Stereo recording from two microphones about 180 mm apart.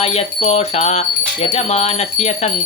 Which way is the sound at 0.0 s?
35° left (ahead or behind).